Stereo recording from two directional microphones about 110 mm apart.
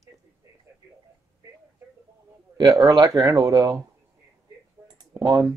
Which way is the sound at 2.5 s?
35° right (ahead or behind).